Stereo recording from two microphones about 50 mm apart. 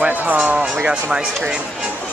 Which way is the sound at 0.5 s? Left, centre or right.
Centre.